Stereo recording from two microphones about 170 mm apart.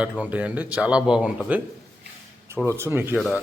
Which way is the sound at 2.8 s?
15° right (ahead or behind).